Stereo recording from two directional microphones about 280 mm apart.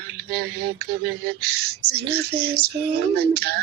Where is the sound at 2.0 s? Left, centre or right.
Right.